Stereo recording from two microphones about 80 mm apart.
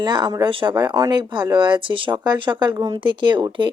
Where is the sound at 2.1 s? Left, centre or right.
Right.